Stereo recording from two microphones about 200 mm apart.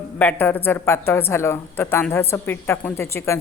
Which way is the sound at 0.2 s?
10° left (ahead or behind).